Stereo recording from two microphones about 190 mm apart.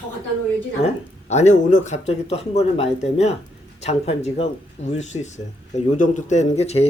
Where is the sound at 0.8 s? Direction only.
35° left (ahead or behind).